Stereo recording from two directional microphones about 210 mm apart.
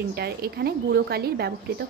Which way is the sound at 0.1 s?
50° right (ahead or behind).